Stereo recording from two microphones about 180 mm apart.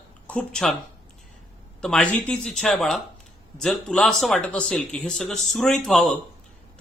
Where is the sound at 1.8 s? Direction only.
5° left (ahead or behind).